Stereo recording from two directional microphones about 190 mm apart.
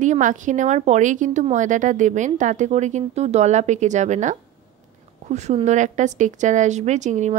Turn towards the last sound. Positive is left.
turn(degrees=-40)  # may be behind; listen again after turning